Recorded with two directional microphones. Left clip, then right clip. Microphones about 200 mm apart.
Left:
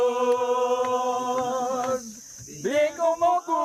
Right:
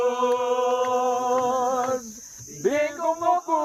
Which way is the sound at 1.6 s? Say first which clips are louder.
Right 2 dB; 25° right (ahead or behind).